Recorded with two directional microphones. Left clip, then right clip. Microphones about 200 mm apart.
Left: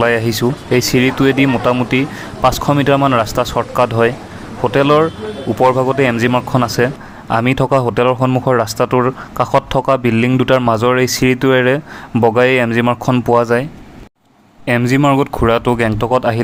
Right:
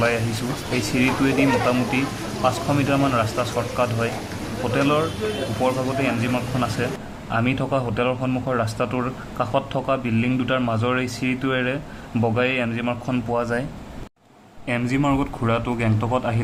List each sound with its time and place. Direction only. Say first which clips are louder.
0.4 s speech: left 10 dB; 45° left (ahead or behind)
14.7 s speech: left 9 dB; 45° left (ahead or behind)